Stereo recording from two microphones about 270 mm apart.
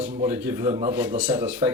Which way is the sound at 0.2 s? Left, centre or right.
Centre.